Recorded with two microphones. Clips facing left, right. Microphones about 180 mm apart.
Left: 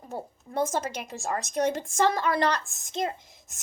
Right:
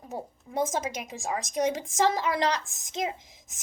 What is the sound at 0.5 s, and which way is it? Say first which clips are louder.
A woman's voice: left 1 dB; 15° right (ahead or behind).